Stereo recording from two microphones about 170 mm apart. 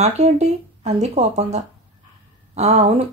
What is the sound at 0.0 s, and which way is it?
A woman's voice, 40° right (ahead or behind).